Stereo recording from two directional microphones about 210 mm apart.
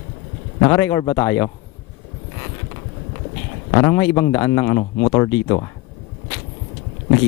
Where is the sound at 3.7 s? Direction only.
20° left (ahead or behind).